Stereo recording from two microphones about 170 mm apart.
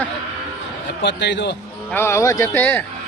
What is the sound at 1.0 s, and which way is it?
Speech, 90° left.